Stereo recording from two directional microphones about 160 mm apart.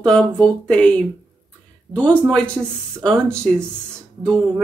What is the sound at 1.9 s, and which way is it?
Speech, centre (ahead or behind).